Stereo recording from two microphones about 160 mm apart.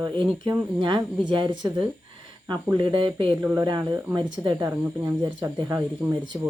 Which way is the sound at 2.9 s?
30° right (ahead or behind).